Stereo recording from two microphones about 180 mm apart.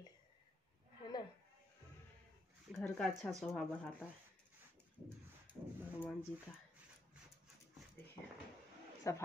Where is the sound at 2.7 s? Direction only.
Centre (ahead or behind).